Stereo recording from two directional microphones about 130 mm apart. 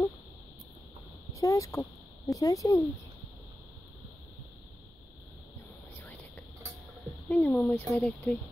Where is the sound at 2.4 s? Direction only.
25° left (ahead or behind).